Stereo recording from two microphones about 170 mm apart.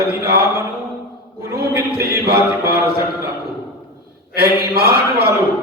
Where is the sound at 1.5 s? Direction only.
70° right (ahead or behind).